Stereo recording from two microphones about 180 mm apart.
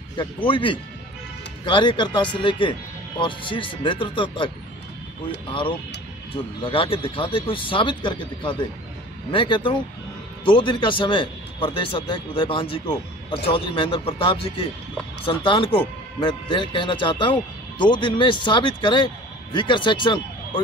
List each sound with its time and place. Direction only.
0.2 s speech: 30° left (ahead or behind)
5.5 s speech: 30° left (ahead or behind)